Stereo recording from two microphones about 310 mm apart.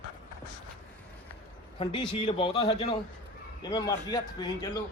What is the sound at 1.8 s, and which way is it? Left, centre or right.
Speech, centre.